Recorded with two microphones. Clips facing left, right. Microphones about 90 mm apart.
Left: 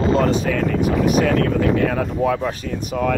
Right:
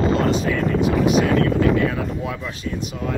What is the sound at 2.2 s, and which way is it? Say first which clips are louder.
Speech: left 7 dB; 45° left (ahead or behind).